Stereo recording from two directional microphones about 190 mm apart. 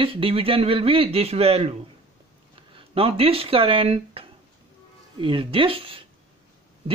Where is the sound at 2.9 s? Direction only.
30° right (ahead or behind).